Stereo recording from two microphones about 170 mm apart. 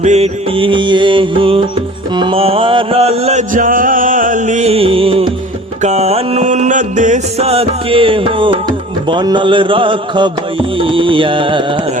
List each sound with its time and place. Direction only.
0.0 s mantra: 40° right (ahead or behind)
5.8 s music: 40° right (ahead or behind)